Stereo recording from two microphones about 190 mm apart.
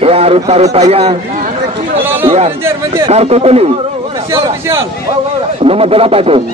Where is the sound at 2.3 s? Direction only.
30° right (ahead or behind).